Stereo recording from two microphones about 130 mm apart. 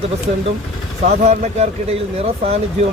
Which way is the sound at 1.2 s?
60° right (ahead or behind).